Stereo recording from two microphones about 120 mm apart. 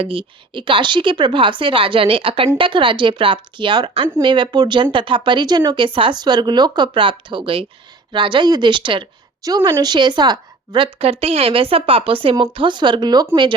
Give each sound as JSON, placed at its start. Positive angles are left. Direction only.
{"t": 0.0, "sound": "a woman's voice", "side_deg": -50}
{"t": 9.4, "sound": "a woman's voice", "side_deg": -35}
{"t": 11.0, "sound": "speech", "side_deg": -55}